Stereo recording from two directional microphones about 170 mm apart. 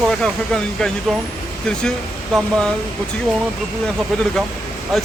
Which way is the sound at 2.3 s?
5° left (ahead or behind).